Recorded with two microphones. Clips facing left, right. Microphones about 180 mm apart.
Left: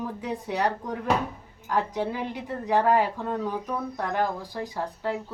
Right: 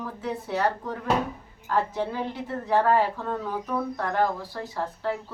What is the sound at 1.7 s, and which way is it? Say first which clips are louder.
A woman's voice: even; 15° left (ahead or behind).